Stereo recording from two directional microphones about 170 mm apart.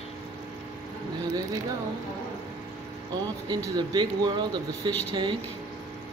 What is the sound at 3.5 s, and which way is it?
Speech, 25° right (ahead or behind).